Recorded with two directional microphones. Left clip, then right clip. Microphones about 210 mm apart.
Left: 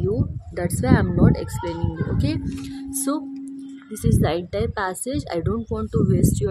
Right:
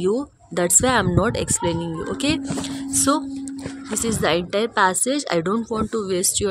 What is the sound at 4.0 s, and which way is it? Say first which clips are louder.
A woman's voice: right 3 dB; 10° right (ahead or behind).